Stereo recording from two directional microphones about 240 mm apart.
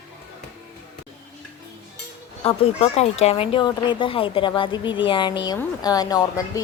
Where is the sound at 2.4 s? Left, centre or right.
Left.